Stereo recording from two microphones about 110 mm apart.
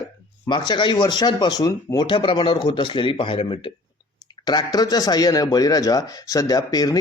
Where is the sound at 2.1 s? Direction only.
50° left (ahead or behind).